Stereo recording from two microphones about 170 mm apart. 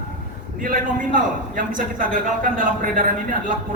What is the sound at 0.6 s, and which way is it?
Speech, 55° right (ahead or behind).